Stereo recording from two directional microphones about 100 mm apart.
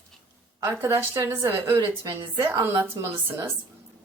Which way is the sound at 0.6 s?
25° right (ahead or behind).